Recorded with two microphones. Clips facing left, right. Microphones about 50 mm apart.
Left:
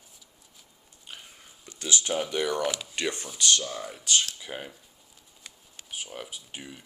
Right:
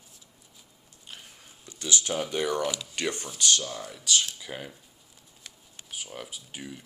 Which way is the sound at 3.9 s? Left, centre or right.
Left.